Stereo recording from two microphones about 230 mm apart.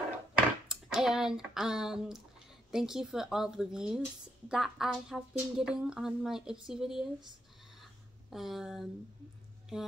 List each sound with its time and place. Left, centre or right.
0.3 s speech: centre
8.3 s speech: centre